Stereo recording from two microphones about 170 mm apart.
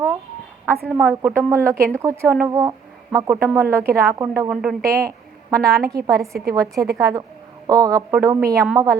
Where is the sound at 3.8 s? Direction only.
60° right (ahead or behind).